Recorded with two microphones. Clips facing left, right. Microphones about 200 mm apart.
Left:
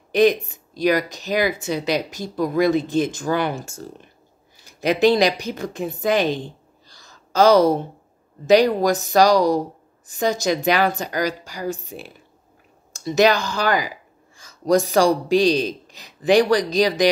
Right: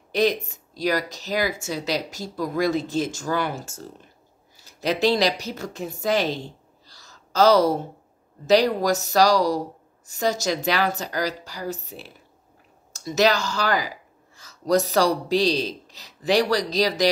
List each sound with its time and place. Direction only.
0.1 s a man's voice: 15° left (ahead or behind)
9.3 s speech: 55° left (ahead or behind)
10.1 s a man's voice: 15° left (ahead or behind)
13.6 s a sound: 15° left (ahead or behind)
14.6 s a man's voice: 15° left (ahead or behind)